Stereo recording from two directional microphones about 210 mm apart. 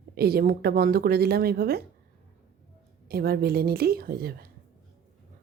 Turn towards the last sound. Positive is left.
turn(degrees=-45)  # may be behind; listen again after turning